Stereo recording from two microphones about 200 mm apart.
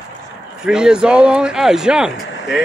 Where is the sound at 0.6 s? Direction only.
5° right (ahead or behind).